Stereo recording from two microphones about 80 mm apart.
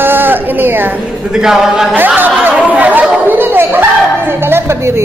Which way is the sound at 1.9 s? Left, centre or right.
Right.